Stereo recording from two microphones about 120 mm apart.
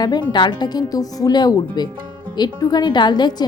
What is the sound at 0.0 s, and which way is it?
A woman's voice, 35° left (ahead or behind).